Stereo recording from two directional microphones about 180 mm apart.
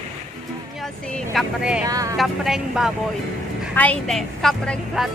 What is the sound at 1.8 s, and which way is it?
Vehicle, 20° right (ahead or behind).